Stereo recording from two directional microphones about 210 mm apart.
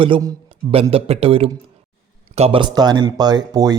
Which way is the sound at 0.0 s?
20° right (ahead or behind).